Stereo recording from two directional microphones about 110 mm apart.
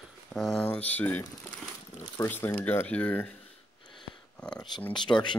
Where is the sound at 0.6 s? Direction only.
15° left (ahead or behind).